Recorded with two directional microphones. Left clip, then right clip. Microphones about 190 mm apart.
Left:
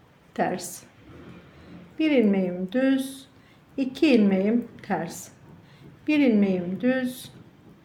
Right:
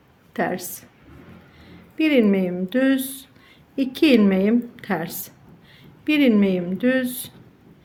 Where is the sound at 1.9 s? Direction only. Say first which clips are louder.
Right 4 dB; 25° right (ahead or behind).